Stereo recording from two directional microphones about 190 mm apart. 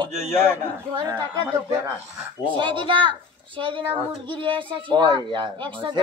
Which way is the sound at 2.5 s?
25° right (ahead or behind).